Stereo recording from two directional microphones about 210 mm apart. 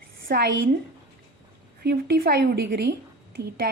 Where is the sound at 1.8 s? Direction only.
50° right (ahead or behind).